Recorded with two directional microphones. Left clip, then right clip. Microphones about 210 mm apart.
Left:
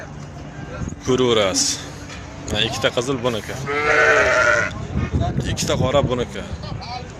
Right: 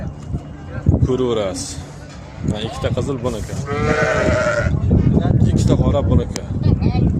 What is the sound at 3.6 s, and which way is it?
Sheep, 60° right (ahead or behind).